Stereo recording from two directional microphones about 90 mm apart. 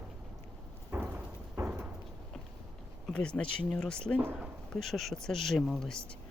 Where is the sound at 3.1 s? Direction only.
10° left (ahead or behind).